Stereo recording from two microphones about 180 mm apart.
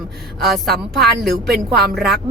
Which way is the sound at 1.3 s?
60° right (ahead or behind).